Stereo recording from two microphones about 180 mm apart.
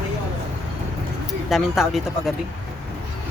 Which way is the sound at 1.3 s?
Centre (ahead or behind).